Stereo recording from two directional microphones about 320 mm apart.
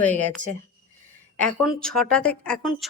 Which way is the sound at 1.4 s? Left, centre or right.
Centre.